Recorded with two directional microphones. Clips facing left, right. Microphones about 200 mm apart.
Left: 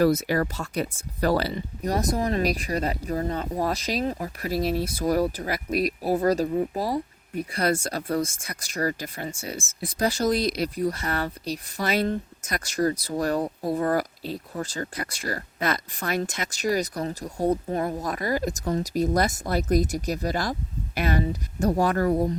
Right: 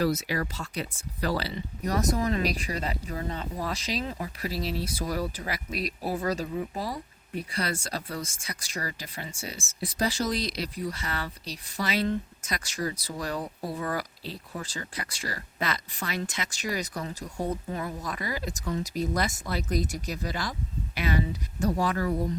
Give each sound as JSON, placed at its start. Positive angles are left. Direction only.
{"t": 0.0, "sound": "speech", "side_deg": 50}
{"t": 1.9, "sound": "speech", "side_deg": 35}
{"t": 7.5, "sound": "speech", "side_deg": 50}